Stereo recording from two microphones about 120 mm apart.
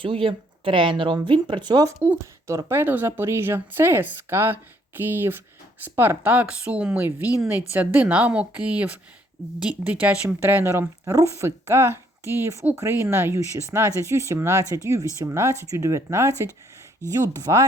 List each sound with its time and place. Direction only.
0.0 s speech: 45° right (ahead or behind)
2.0 s speech: 20° right (ahead or behind)